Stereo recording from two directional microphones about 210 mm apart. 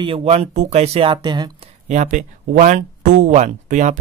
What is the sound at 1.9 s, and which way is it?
Speech, 35° right (ahead or behind).